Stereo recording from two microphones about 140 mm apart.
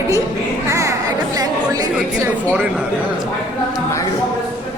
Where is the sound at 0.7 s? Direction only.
25° right (ahead or behind).